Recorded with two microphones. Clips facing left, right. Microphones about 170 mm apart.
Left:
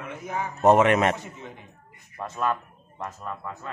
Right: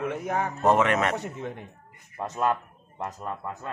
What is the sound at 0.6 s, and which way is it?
Speech, 20° left (ahead or behind).